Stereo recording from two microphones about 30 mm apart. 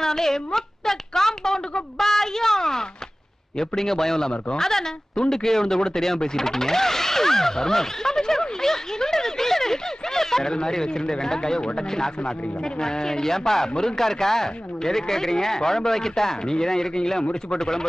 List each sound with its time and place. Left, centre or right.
0.0 s a sound: centre
3.5 s speech: centre
5.8 s a sound: centre
10.5 s speech: left
17.2 s speech: left
17.6 s speech: centre